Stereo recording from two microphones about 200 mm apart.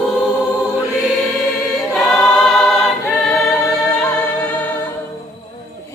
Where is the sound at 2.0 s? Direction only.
Centre (ahead or behind).